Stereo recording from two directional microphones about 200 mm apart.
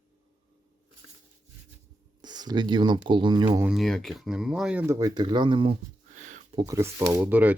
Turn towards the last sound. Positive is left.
turn(degrees=-10)  # may be behind; listen again after turning